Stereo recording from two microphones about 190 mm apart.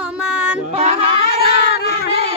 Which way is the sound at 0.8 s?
35° right (ahead or behind).